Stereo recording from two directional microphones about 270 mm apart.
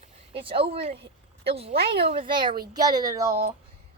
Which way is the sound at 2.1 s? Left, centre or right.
Centre.